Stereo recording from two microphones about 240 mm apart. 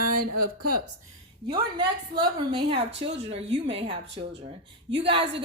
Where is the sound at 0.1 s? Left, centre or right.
Right.